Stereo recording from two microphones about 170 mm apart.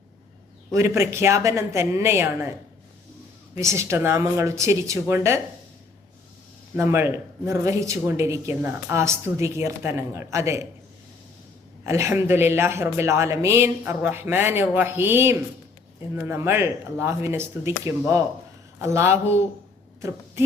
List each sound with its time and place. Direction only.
0.7 s speech: 15° right (ahead or behind)
6.7 s speech: 15° right (ahead or behind)
11.8 s speech: 15° right (ahead or behind)
20.0 s a sound: 15° right (ahead or behind)